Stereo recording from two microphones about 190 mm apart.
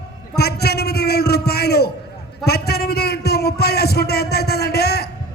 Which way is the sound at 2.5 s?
55° left (ahead or behind).